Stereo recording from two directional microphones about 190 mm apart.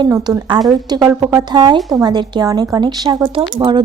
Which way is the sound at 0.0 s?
20° right (ahead or behind).